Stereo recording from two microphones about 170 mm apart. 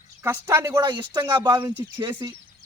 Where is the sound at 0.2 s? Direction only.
15° right (ahead or behind).